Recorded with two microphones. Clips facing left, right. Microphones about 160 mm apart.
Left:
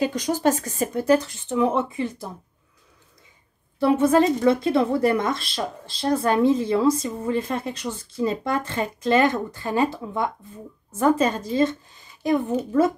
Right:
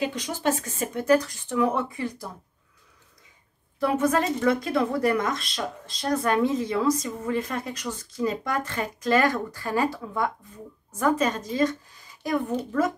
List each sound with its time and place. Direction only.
0.0 s speech: 40° left (ahead or behind); by 2.2 s 25° left (ahead or behind)
3.8 s a woman's voice: 30° left (ahead or behind)